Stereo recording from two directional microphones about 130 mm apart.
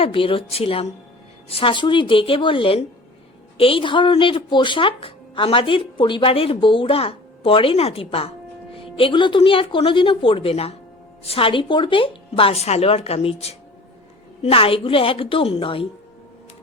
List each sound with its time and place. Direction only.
0.0 s speech: 45° left (ahead or behind)